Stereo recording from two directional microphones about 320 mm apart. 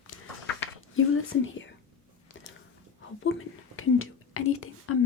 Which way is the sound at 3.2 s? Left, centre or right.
Left.